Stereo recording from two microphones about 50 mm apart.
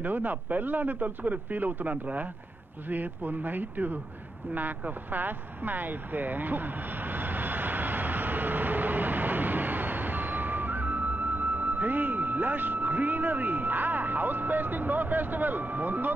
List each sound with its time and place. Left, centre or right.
0.0 s a man's voice: right
4.6 s vehicle: right